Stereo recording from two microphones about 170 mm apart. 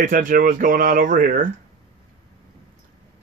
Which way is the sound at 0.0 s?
55° right (ahead or behind).